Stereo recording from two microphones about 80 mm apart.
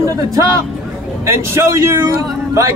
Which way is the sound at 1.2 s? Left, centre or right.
Right.